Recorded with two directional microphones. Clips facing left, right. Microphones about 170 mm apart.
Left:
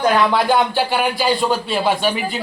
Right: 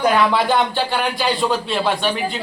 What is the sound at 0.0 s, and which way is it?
Speech, centre (ahead or behind).